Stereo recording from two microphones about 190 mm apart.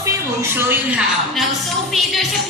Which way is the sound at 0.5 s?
10° right (ahead or behind).